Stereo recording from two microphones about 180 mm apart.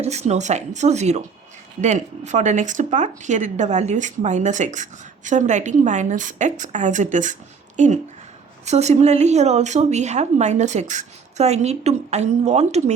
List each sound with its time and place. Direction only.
0.0 s speech: 35° right (ahead or behind)